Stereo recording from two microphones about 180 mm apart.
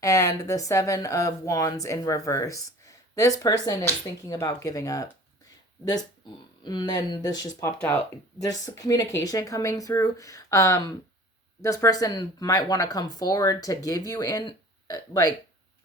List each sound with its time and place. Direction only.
0.0 s speech: 20° left (ahead or behind)
6.7 s speech: 25° left (ahead or behind)